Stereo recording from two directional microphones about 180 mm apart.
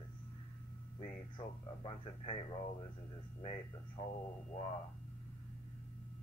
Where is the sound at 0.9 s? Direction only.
30° left (ahead or behind).